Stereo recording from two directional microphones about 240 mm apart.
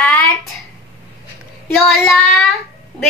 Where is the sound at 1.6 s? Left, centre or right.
Centre.